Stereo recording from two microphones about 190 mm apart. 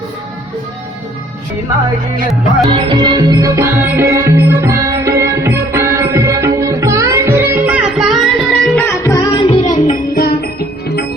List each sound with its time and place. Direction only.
2.6 s music: 25° right (ahead or behind); by 8.8 s centre (ahead or behind)
8.9 s music: 15° left (ahead or behind); by 10.5 s 55° left (ahead or behind)